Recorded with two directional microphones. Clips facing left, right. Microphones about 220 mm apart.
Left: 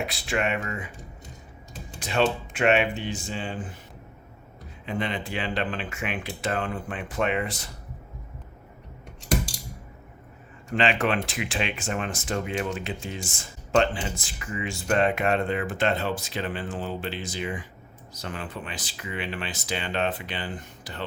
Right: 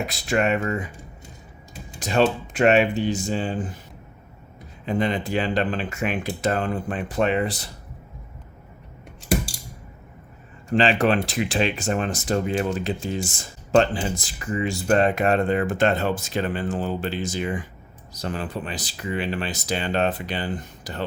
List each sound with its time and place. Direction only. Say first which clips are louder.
0.0 s speech: right 5 dB; 45° right (ahead or behind)
2.0 s speech: right 4 dB; 40° right (ahead or behind)
4.9 s speech: right 6 dB; 40° right (ahead or behind)
10.7 s speech: right 5 dB; 35° right (ahead or behind)